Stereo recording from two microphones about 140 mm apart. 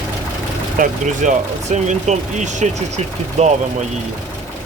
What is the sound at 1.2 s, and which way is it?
Speech, 60° right (ahead or behind).